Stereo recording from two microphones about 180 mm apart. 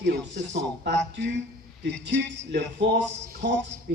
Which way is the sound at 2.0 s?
75° right (ahead or behind).